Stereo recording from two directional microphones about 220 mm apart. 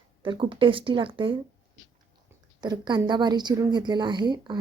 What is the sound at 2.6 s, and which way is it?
A woman's voice, 20° right (ahead or behind).